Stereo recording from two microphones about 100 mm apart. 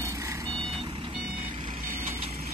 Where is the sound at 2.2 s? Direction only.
90° right.